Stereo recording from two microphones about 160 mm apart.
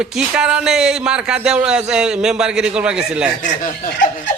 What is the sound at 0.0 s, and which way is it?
A man's voice, 5° right (ahead or behind).